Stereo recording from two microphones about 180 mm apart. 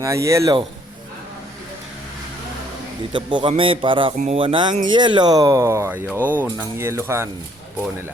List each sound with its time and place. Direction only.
0.0 s speech: 15° right (ahead or behind)
3.1 s speech: 25° right (ahead or behind)